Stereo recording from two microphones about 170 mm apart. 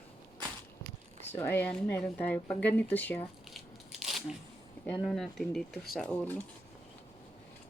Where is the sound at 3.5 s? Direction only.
Centre (ahead or behind).